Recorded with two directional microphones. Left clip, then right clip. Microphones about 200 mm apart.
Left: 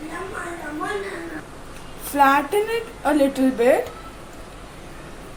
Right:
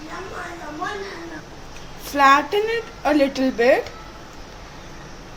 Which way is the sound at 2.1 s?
15° right (ahead or behind).